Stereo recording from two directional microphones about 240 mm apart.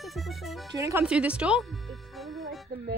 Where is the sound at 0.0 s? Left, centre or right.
Centre.